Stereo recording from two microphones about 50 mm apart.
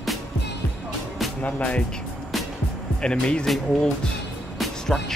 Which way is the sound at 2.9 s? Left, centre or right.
Left.